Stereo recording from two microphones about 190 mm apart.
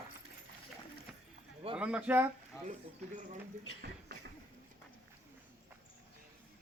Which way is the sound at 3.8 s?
60° right (ahead or behind).